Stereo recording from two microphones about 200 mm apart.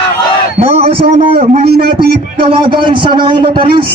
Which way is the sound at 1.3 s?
35° right (ahead or behind).